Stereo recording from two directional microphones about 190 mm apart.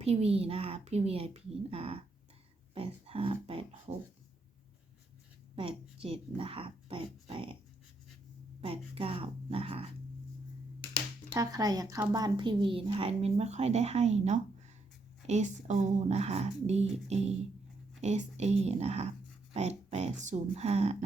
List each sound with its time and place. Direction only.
0.0 s a woman's voice: 35° right (ahead or behind)
5.5 s speech: 30° right (ahead or behind)
8.6 s a woman's voice: 30° right (ahead or behind)
11.3 s a woman's voice: 20° right (ahead or behind); by 20.9 s 35° right (ahead or behind)